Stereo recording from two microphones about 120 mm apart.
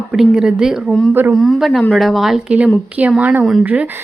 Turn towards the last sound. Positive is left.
turn(degrees=-15)  # may be behind; listen again after turning